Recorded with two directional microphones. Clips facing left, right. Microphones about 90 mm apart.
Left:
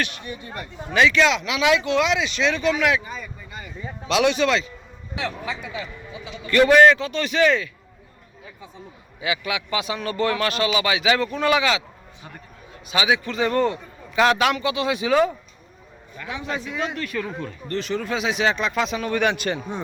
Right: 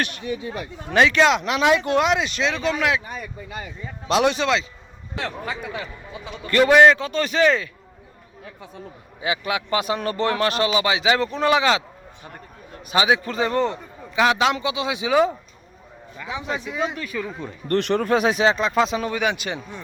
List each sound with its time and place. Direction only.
0.3 s speech: 90° right
0.9 s speech: 45° right (ahead or behind)
3.1 s speech: 75° right (ahead or behind)
4.1 s a man's voice: 35° right (ahead or behind)
5.1 s speech: 50° right (ahead or behind)
6.7 s speech: 10° right (ahead or behind)
6.9 s a man's voice: 40° right (ahead or behind)
9.2 s a man's voice: 35° right (ahead or behind)
12.9 s a man's voice: 35° right (ahead or behind)
13.5 s a man's voice: 20° right (ahead or behind); by 17.3 s 5° right (ahead or behind)
17.7 s speech: 60° right (ahead or behind); by 18.4 s 45° right (ahead or behind)
18.4 s a man's voice: 30° right (ahead or behind)
19.1 s speech: 10° right (ahead or behind)